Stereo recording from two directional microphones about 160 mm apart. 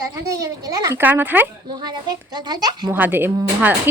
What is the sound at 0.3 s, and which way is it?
Speech, 20° right (ahead or behind).